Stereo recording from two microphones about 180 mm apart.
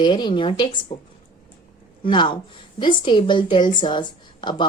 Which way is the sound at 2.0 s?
25° left (ahead or behind).